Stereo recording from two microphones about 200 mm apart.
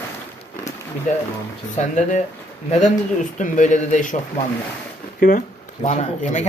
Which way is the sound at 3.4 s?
40° left (ahead or behind).